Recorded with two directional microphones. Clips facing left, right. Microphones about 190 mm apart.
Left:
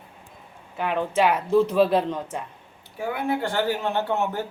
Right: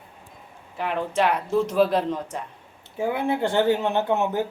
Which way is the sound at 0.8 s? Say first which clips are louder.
Left 1 dB; centre (ahead or behind).